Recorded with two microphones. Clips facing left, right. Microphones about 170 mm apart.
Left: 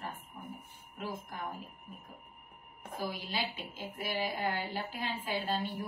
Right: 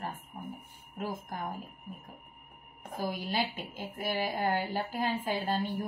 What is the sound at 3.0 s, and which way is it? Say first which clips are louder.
A woman's voice: right 4 dB; 45° right (ahead or behind).